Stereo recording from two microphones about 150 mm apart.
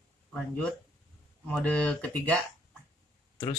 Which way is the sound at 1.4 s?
10° left (ahead or behind).